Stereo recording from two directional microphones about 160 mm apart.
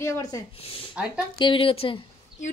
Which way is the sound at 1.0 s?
10° right (ahead or behind).